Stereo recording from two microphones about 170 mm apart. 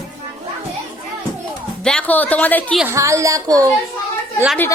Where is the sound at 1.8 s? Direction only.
5° left (ahead or behind).